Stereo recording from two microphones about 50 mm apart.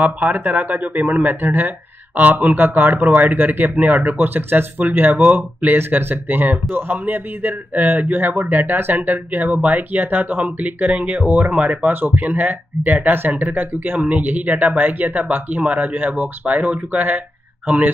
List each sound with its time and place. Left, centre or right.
0.0 s speech: right
5.8 s speech: right
17.6 s a sound: right